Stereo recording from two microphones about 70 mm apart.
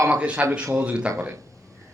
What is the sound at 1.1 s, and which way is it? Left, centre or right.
Speech, right.